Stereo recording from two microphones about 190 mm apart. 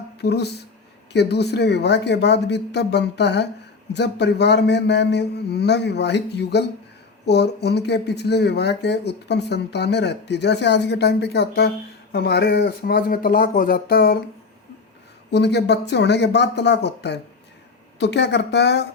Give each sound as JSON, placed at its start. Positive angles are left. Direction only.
{"t": 0.2, "sound": "speech", "side_deg": 60}
{"t": 15.3, "sound": "speech", "side_deg": 65}